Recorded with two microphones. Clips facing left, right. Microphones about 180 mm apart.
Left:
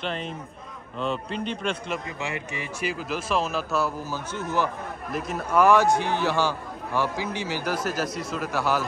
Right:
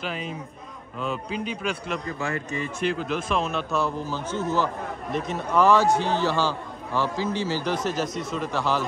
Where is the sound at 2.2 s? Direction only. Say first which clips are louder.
Right 3 dB; 15° left (ahead or behind).